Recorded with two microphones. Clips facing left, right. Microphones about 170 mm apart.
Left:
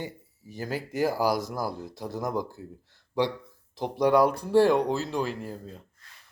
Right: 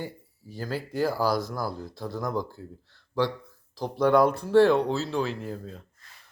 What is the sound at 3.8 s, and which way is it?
Speech, 20° left (ahead or behind).